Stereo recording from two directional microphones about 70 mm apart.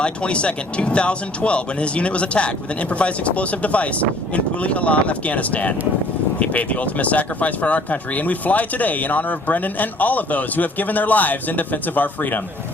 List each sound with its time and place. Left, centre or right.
0.0 s speech: centre